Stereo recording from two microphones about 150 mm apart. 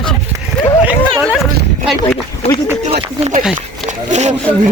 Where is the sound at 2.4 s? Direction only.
45° left (ahead or behind).